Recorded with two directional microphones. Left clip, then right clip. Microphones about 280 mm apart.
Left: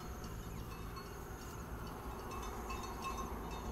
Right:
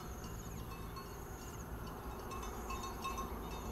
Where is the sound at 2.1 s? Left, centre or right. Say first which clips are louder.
Even; left.